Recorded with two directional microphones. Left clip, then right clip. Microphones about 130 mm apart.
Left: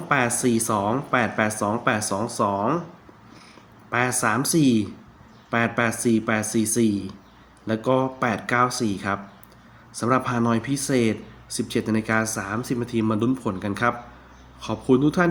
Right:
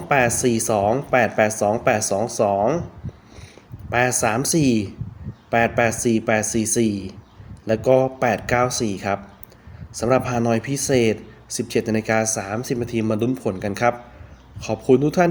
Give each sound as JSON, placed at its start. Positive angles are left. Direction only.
{"t": 0.1, "sound": "speech", "side_deg": -40}
{"t": 3.8, "sound": "speech", "side_deg": -40}